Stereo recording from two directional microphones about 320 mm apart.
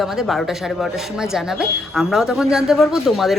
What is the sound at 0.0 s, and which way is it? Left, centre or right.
Speech, centre.